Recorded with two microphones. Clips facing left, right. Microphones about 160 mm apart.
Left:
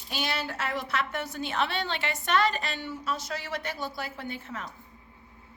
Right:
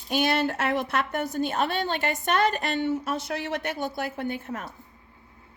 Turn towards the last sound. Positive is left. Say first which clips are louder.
# right 6 dB
turn(degrees=-55)  # may be behind; listen again after turning